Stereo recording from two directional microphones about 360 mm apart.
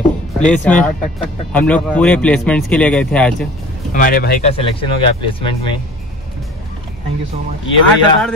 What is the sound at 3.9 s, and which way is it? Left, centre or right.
Speech, left.